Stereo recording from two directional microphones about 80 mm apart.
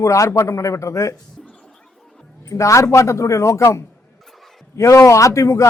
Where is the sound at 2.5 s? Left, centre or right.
Left.